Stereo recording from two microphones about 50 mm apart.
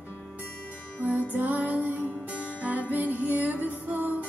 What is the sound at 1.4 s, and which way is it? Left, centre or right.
Music, right.